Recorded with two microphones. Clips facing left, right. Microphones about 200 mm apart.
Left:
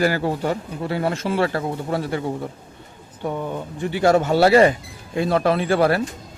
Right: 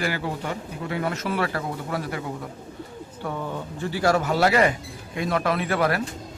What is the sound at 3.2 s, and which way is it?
Speech, 20° left (ahead or behind).